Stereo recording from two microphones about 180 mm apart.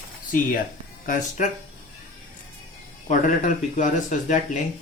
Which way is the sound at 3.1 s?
45° left (ahead or behind).